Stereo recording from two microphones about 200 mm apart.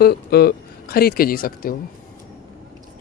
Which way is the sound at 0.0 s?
50° left (ahead or behind).